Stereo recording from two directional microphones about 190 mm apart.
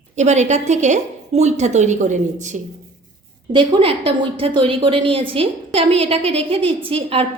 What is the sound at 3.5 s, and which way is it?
A woman's voice, 30° right (ahead or behind).